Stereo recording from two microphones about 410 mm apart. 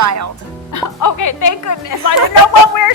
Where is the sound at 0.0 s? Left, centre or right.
Right.